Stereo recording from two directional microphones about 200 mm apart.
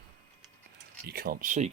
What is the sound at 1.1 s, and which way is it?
Speech, 50° right (ahead or behind).